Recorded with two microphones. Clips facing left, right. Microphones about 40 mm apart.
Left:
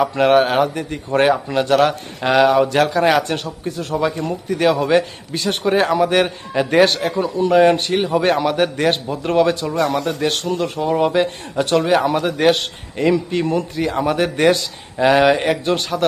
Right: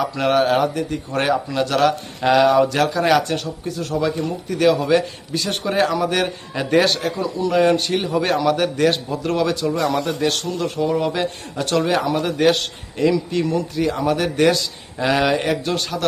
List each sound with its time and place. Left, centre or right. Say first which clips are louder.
0.2 s a man's voice: left 2 dB; left
3.2 s a man's voice: left 1 dB; left
3.9 s a man's voice: left 1 dB; centre
6.5 s speech: left 3 dB; centre
6.8 s a man's voice: left 3 dB; left
10.4 s a man's voice: left 2 dB; left
10.8 s a man's voice: left 5 dB; left
15.6 s a man's voice: left 4 dB; left